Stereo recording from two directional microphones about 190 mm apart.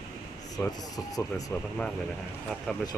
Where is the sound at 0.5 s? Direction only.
20° left (ahead or behind).